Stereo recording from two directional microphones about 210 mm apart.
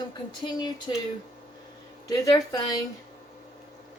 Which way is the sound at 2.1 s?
15° left (ahead or behind).